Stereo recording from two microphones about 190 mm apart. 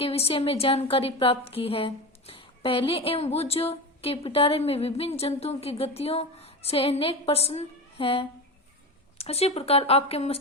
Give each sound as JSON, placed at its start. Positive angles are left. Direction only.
{"t": 0.0, "sound": "a woman's voice", "side_deg": 30}